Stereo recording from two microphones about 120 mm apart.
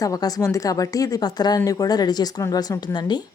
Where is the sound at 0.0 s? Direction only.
30° left (ahead or behind).